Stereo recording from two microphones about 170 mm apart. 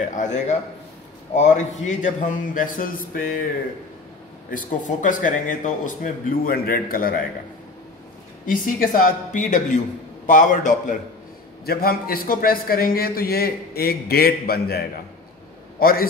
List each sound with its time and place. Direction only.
0.0 s a man's voice: 45° left (ahead or behind)
4.5 s a man's voice: 50° left (ahead or behind)
8.5 s a man's voice: 55° left (ahead or behind)
11.6 s a man's voice: 60° left (ahead or behind)